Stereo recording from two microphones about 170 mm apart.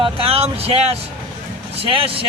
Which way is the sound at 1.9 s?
35° right (ahead or behind).